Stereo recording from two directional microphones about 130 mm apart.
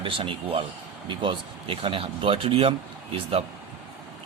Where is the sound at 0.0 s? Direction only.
40° right (ahead or behind).